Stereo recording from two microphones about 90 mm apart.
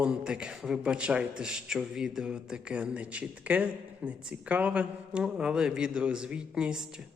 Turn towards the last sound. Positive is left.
turn(degrees=-10)  # may be behind; listen again after turning